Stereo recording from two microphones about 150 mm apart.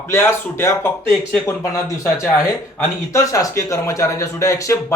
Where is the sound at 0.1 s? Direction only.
15° left (ahead or behind).